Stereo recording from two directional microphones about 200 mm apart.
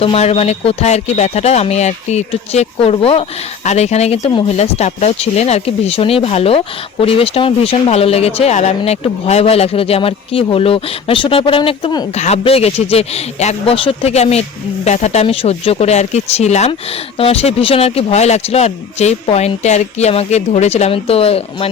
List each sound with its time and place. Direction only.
0.0 s a man's voice: 30° left (ahead or behind)